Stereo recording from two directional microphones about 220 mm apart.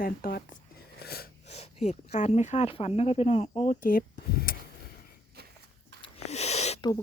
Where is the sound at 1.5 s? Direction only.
30° left (ahead or behind); by 4.5 s 45° left (ahead or behind).